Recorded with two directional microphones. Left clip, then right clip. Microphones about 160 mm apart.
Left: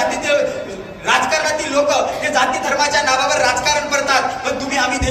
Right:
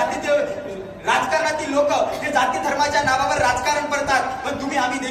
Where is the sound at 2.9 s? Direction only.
30° left (ahead or behind).